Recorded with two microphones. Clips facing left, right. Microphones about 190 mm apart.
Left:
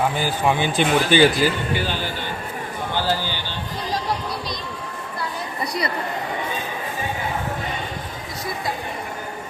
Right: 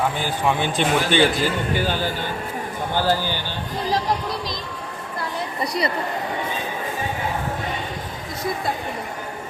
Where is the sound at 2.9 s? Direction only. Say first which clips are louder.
Right 3 dB; 50° right (ahead or behind).